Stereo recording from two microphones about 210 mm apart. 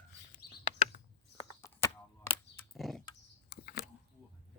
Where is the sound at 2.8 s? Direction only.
Centre (ahead or behind).